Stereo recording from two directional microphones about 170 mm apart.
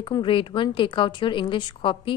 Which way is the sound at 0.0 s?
30° left (ahead or behind).